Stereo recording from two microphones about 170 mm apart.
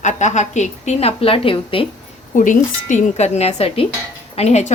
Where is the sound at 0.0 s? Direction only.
45° left (ahead or behind).